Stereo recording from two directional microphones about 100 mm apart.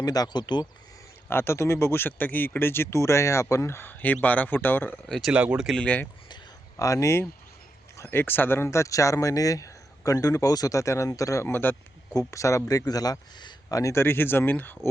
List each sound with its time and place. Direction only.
0.0 s speech: 40° left (ahead or behind)
1.3 s speech: 25° left (ahead or behind)
5.0 s speech: 5° left (ahead or behind)
5.3 s speech: 10° right (ahead or behind)
5.6 s speech: 10° left (ahead or behind)
6.7 s speech: 35° left (ahead or behind)
12.3 s speech: 30° left (ahead or behind)